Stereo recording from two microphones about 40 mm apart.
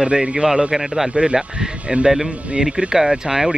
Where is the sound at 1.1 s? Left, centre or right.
Centre.